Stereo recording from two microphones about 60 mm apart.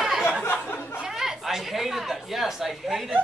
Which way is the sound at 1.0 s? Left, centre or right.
Centre.